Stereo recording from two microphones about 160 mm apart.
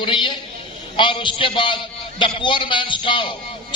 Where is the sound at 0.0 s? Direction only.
30° left (ahead or behind).